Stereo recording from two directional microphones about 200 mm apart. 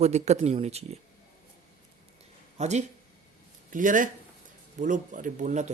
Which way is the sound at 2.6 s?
35° right (ahead or behind).